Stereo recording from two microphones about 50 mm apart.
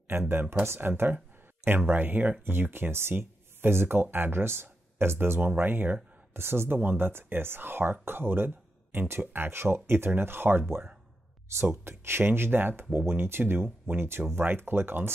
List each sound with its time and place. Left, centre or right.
0.3 s speech: right
6.3 s speech: right
11.8 s speech: right